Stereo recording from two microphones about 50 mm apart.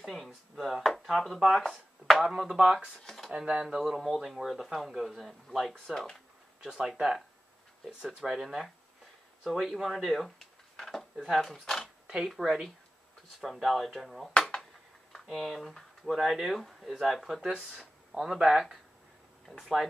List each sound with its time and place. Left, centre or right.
0.0 s a sound: centre
1.0 s speech: centre
2.2 s speech: centre
8.2 s speech: centre
12.4 s speech: centre
15.3 s speech: centre